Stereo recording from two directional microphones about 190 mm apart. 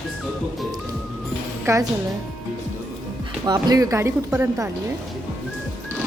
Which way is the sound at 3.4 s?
20° right (ahead or behind).